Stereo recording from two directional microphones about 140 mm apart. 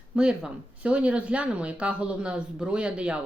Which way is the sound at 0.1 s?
5° right (ahead or behind).